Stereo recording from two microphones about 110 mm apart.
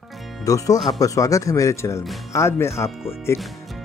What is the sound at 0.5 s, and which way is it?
Speech, 30° left (ahead or behind).